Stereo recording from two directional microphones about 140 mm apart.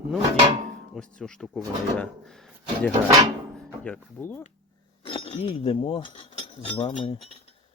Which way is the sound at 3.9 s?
15° left (ahead or behind).